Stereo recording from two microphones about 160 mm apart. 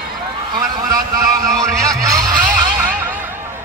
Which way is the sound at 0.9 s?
20° right (ahead or behind).